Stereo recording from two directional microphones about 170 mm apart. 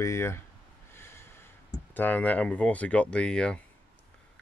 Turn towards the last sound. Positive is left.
turn(degrees=5)  # may be behind; listen again after turning